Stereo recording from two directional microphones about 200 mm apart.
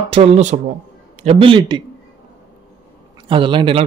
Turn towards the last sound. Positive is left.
turn(degrees=-25)  # may be behind; listen again after turning